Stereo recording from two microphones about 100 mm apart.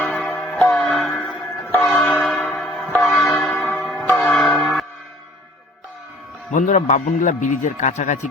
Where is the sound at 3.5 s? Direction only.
15° left (ahead or behind).